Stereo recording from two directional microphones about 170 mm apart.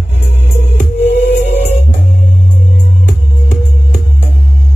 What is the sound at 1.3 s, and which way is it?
Music, 40° left (ahead or behind).